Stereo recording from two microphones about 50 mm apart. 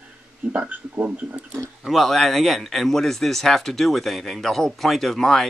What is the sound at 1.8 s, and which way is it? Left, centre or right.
Speech, centre.